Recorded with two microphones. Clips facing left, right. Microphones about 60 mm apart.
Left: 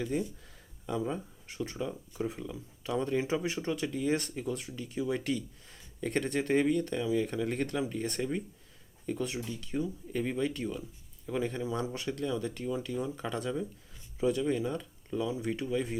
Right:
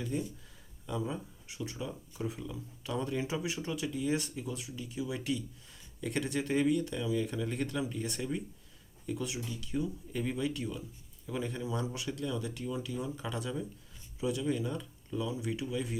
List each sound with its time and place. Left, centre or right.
0.0 s speech: left
0.9 s speech: left
1.5 s speech: left
1.9 s speech: left
7.4 s speech: left